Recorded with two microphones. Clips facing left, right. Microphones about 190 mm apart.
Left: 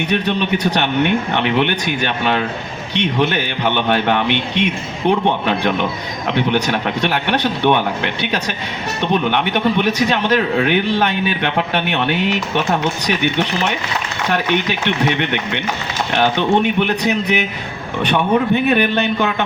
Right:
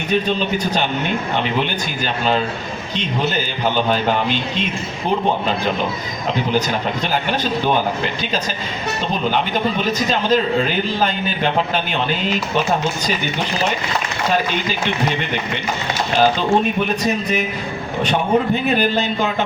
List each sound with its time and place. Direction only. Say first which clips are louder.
0.1 s a man's voice: right 2 dB; 70° left (ahead or behind)